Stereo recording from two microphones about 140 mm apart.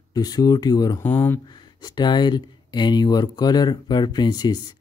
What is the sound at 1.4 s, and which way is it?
Speech, 30° left (ahead or behind).